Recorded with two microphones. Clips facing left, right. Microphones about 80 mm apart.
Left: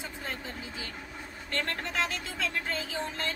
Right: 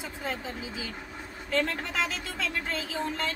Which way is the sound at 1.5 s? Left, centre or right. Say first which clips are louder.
Right 3 dB; centre.